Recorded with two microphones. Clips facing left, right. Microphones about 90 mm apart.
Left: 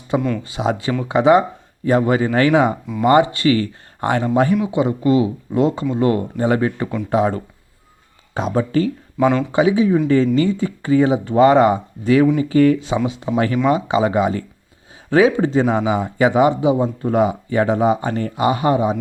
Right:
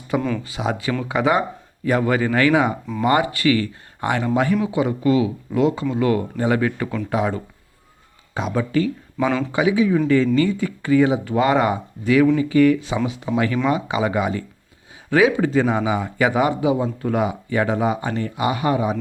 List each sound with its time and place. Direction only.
0.2 s speech: centre (ahead or behind)
0.4 s speech: 30° left (ahead or behind)
4.5 s speech: 20° left (ahead or behind)
18.1 s speech: 45° left (ahead or behind); by 18.9 s 25° left (ahead or behind)